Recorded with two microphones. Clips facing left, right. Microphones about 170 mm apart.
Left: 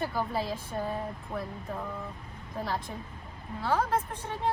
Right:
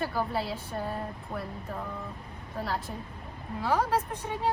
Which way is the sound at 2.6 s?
Centre (ahead or behind).